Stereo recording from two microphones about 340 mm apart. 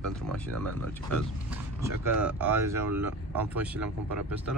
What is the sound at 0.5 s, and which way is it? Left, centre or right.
Speech, right.